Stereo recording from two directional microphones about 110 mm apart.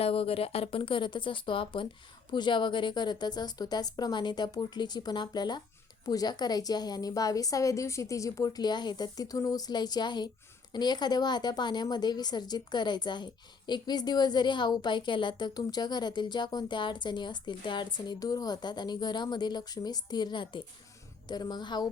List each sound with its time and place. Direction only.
0.0 s a woman's voice: 60° left (ahead or behind); by 21.8 s 40° left (ahead or behind)